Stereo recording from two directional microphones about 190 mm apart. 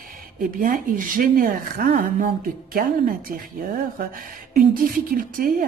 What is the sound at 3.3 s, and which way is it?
Speech, 50° right (ahead or behind).